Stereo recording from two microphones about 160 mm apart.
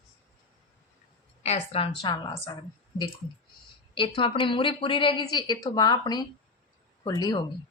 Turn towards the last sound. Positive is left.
turn(degrees=25)  # may be behind; listen again after turning